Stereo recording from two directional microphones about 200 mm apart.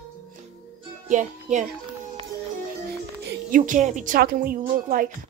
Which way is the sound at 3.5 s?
40° right (ahead or behind).